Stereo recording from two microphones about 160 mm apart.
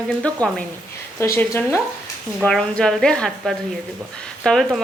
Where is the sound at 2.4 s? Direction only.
5° left (ahead or behind).